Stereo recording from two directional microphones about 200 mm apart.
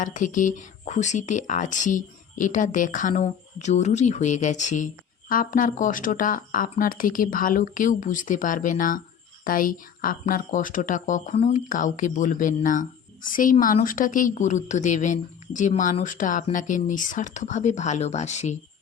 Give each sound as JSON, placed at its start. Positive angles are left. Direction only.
{"t": 0.0, "sound": "speech", "side_deg": 40}